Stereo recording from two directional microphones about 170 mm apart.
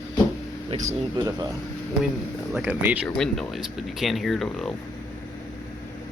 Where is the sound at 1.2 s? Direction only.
20° right (ahead or behind).